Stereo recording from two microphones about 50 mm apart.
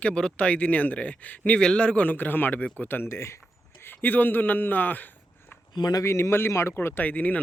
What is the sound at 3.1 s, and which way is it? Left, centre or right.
Speech, left.